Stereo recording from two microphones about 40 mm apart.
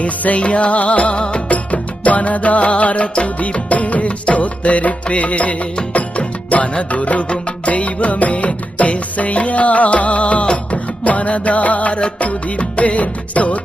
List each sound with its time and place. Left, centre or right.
0.0 s music: left